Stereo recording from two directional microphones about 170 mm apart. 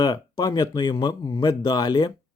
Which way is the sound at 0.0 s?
25° left (ahead or behind).